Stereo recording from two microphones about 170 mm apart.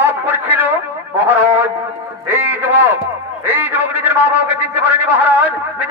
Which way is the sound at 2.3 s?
10° right (ahead or behind).